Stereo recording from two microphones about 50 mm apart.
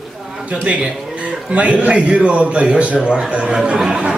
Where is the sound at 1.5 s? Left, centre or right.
Right.